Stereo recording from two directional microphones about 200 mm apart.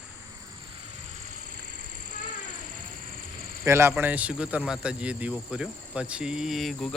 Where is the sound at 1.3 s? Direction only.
40° right (ahead or behind).